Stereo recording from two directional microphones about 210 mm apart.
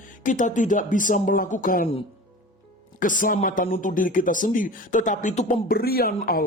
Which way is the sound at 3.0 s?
40° left (ahead or behind).